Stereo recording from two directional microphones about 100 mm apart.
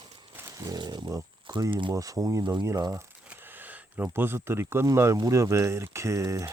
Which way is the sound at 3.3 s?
15° right (ahead or behind).